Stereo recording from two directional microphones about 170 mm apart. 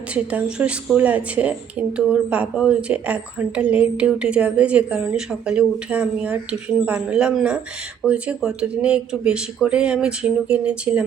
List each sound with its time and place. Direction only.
0.1 s a woman's voice: 5° right (ahead or behind)